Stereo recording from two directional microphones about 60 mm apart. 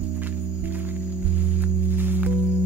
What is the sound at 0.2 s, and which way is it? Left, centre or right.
Music, right.